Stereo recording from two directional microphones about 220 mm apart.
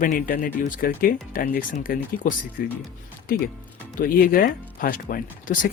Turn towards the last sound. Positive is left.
turn(degrees=40)  # may be behind; listen again after turning